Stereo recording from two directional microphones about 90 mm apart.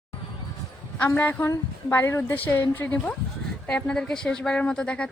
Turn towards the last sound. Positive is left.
turn(degrees=10)  # may be behind; listen again after turning